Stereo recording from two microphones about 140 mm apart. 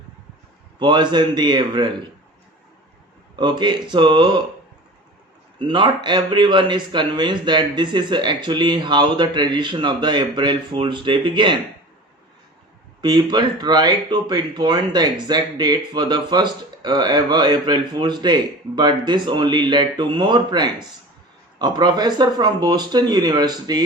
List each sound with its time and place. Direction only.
0.8 s speech: 35° right (ahead or behind)
3.3 s speech: 35° right (ahead or behind)
5.5 s speech: 35° right (ahead or behind)
13.0 s speech: 30° right (ahead or behind)